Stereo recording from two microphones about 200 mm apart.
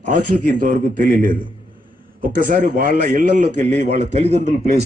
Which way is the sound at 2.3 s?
40° right (ahead or behind).